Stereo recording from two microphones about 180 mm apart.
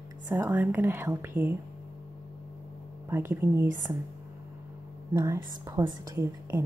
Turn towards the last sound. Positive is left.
turn(degrees=-15)  # may be behind; listen again after turning